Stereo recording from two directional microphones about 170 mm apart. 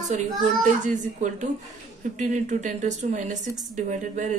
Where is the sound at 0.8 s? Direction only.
45° right (ahead or behind).